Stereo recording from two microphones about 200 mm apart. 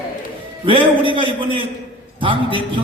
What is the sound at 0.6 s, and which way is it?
Music, 25° right (ahead or behind).